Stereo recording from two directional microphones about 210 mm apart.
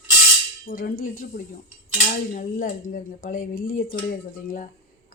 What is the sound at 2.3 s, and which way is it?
Speech, 40° left (ahead or behind).